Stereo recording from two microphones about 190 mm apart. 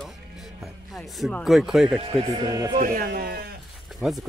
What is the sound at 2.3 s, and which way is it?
Speech, 20° right (ahead or behind).